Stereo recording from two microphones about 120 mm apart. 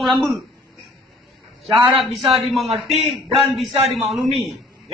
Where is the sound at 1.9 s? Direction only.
Centre (ahead or behind).